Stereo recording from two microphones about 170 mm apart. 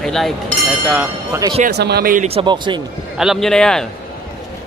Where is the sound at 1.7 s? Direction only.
70° right (ahead or behind).